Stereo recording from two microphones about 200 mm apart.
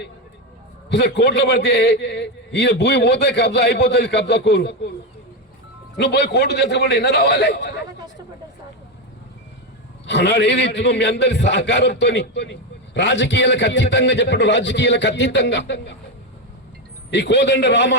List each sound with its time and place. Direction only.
0.9 s a man's voice: 60° left (ahead or behind)
6.0 s a man's voice: 55° left (ahead or behind)
10.1 s a man's voice: 60° left (ahead or behind)
17.1 s a man's voice: 60° left (ahead or behind)